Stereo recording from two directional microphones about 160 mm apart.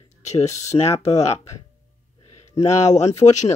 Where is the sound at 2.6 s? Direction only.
45° left (ahead or behind).